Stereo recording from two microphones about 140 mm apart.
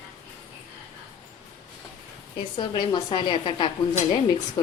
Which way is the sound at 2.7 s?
30° left (ahead or behind).